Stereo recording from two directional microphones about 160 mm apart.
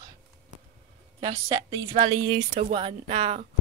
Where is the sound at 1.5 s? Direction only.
35° right (ahead or behind).